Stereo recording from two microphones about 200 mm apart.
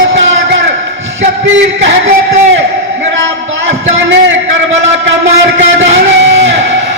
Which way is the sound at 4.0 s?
65° right (ahead or behind).